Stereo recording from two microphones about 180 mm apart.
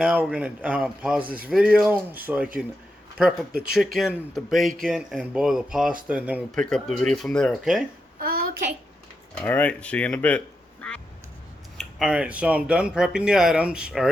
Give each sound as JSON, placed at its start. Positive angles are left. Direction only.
{"t": 0.0, "sound": "speech", "side_deg": -5}
{"t": 6.6, "sound": "speech", "side_deg": 5}
{"t": 8.2, "sound": "a sound", "side_deg": -55}
{"t": 9.4, "sound": "speech", "side_deg": 10}
{"t": 11.8, "sound": "speech", "side_deg": 0}